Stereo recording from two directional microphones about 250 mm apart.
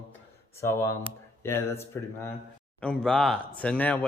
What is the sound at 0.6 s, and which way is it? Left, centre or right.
Speech, centre.